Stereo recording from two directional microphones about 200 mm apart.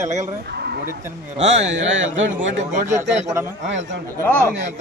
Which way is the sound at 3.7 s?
65° right (ahead or behind).